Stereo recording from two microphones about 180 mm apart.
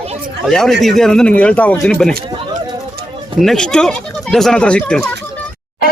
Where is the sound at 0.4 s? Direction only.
Centre (ahead or behind).